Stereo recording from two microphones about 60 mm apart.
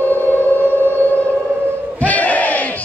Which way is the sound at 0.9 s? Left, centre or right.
Left.